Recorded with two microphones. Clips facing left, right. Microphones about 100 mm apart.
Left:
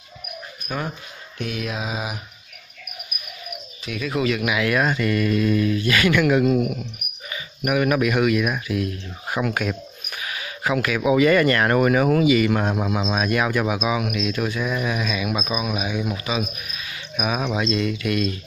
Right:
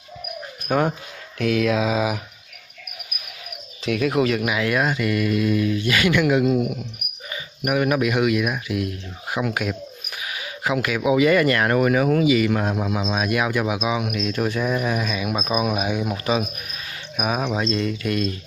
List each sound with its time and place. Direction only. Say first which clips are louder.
0.7 s speech: right 8 dB; 60° right (ahead or behind)
1.4 s a sound: right 8 dB; 90° right
3.1 s cricket: left 1 dB; 90° right
3.8 s speech: right 4 dB; 65° right (ahead or behind); by 4.6 s 35° right (ahead or behind)
4.6 s speech: left 2 dB; 15° right (ahead or behind)
7.2 s speech: even; 30° right (ahead or behind)
9.4 s a sound: even; 10° right (ahead or behind)
11.1 s speech: even; 15° right (ahead or behind); by 13.0 s 10° left (ahead or behind)
13.1 s speech: even; 10° right (ahead or behind)
14.1 s speech: right 1 dB; 40° right (ahead or behind)